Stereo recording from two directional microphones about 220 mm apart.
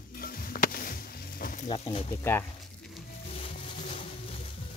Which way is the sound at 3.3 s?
25° left (ahead or behind).